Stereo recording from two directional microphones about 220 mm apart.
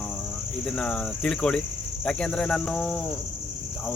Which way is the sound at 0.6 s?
5° left (ahead or behind).